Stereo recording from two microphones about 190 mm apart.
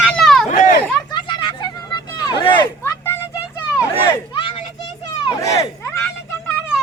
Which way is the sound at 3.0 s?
15° left (ahead or behind).